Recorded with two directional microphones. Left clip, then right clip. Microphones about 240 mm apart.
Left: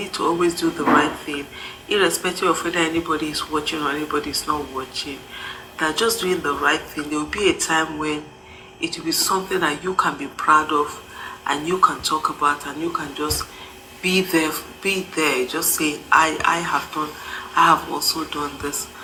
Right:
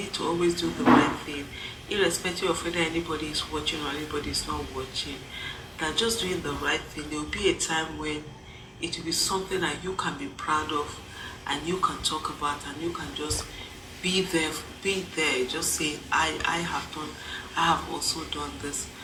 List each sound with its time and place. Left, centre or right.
0.1 s speech: left
1.9 s speech: left
5.8 s speech: left